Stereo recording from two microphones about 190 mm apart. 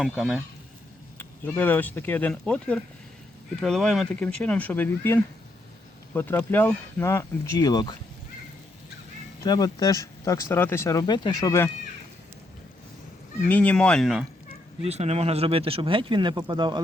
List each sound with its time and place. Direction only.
0.1 s speech: centre (ahead or behind)
1.2 s speech: 10° left (ahead or behind)
9.4 s speech: 20° left (ahead or behind)
13.5 s speech: 10° left (ahead or behind)
14.8 s speech: 35° right (ahead or behind)